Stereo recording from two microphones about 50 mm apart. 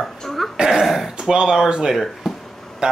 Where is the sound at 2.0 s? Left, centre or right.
Centre.